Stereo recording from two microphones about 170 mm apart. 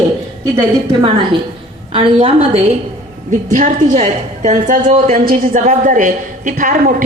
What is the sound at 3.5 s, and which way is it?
A woman's voice, 45° right (ahead or behind).